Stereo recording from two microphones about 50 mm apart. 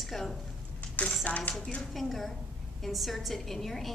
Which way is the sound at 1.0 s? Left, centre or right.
Left.